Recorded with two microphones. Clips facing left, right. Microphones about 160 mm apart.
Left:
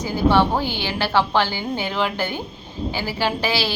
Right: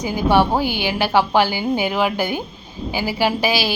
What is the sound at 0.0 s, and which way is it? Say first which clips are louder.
A woman's voice: right 1 dB; 15° right (ahead or behind).